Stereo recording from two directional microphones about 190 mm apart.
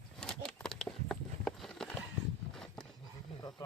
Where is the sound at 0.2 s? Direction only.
5° left (ahead or behind).